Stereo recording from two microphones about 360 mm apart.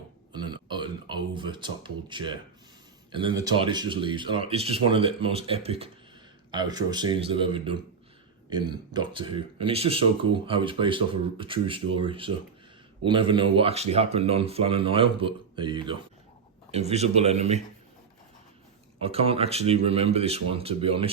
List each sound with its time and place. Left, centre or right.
0.3 s a sound: centre
3.1 s speech: centre
19.0 s speech: centre